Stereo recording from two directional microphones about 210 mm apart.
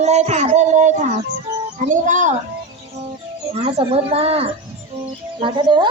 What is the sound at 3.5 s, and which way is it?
Speech, 25° right (ahead or behind).